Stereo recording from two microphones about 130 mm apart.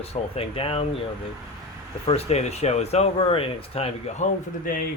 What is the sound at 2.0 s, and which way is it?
Speech, 55° left (ahead or behind).